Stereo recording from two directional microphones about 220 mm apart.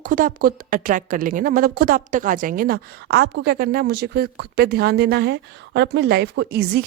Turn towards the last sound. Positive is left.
turn(degrees=-45)  # may be behind; listen again after turning